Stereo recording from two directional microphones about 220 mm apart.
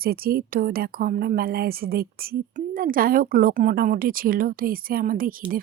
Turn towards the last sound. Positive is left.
turn(degrees=-40)  # may be behind; listen again after turning